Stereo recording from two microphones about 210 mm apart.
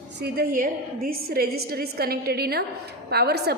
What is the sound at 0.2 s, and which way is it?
A woman's voice, 45° right (ahead or behind).